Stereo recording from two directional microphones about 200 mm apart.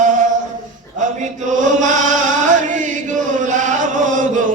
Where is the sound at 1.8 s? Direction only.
40° right (ahead or behind).